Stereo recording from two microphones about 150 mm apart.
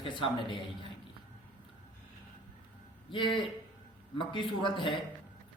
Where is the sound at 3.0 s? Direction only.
35° left (ahead or behind).